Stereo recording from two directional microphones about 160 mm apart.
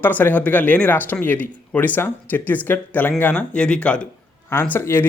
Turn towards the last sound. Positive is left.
turn(degrees=15)  # may be behind; listen again after turning